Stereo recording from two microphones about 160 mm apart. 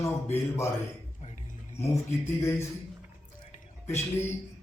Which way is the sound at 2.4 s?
15° left (ahead or behind).